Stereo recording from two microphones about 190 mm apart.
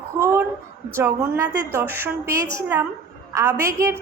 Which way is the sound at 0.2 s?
10° right (ahead or behind).